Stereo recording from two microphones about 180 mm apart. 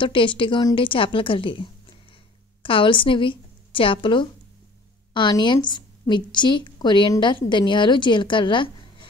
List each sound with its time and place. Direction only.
0.0 s a woman's voice: 30° left (ahead or behind)